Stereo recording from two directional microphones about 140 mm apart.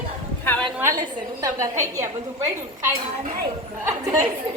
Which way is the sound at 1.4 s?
20° right (ahead or behind).